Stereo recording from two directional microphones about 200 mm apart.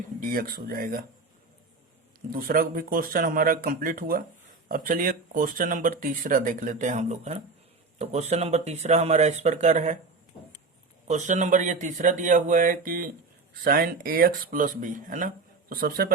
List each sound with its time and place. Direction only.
0.2 s speech: 45° right (ahead or behind)
2.3 s speech: 45° right (ahead or behind)
11.1 s speech: 40° right (ahead or behind)